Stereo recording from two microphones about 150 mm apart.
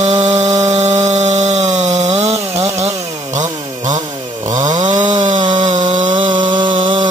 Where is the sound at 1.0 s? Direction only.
50° right (ahead or behind).